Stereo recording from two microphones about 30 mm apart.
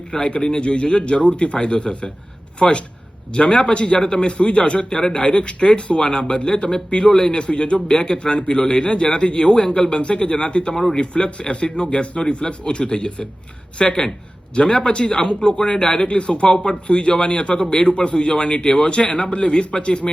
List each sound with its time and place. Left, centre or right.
0.1 s a man's voice: left
4.3 s a man's voice: left
16.0 s speech: left